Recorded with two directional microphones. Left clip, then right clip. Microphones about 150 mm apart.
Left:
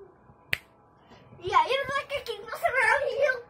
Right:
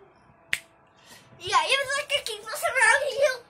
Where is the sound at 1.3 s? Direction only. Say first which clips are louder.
Even; 5° right (ahead or behind).